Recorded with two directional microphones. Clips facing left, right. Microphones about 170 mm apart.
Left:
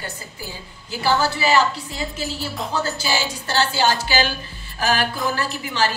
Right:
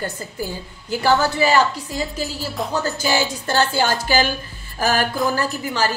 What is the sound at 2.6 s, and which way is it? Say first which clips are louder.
Cutlery: right 6 dB; centre (ahead or behind).